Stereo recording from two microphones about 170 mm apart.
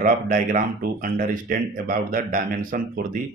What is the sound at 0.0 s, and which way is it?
Speech, 55° right (ahead or behind).